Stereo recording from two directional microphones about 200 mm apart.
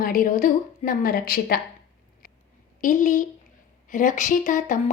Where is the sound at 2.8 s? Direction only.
40° left (ahead or behind).